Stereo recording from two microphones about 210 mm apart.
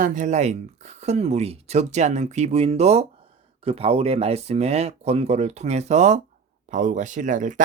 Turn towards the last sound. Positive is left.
turn(degrees=-35)  # may be behind; listen again after turning